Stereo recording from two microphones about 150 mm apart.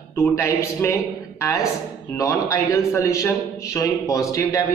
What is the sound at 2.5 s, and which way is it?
A man's voice, 20° left (ahead or behind).